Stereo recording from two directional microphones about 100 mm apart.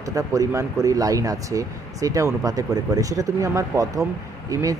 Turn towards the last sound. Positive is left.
turn(degrees=-35)  # may be behind; listen again after turning